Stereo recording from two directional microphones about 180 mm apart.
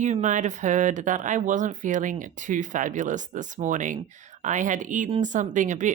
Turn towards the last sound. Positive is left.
turn(degrees=-45)  # may be behind; listen again after turning